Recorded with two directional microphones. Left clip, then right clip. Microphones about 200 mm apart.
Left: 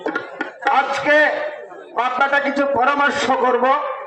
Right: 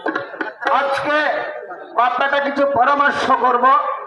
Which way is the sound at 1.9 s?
20° left (ahead or behind).